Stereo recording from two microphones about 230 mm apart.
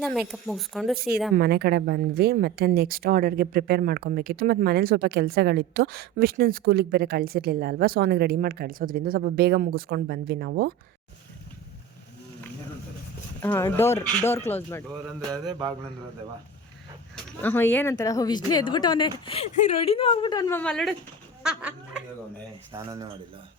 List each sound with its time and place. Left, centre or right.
0.0 s speech: centre
0.9 s speech: right
13.4 s speech: centre
15.3 s mantra: centre
17.4 s speech: centre
22.7 s speech: centre